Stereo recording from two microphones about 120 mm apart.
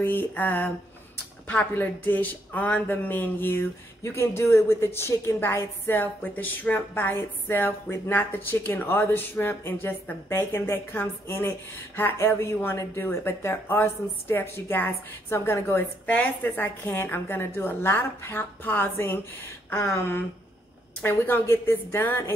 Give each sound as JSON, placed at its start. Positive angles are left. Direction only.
{"t": 0.0, "sound": "a woman's voice", "side_deg": 15}